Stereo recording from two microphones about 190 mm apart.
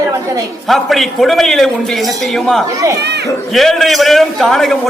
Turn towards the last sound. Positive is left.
turn(degrees=0)  # may be behind; listen again after turning